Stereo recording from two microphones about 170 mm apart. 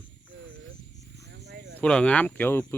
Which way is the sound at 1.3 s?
80° right.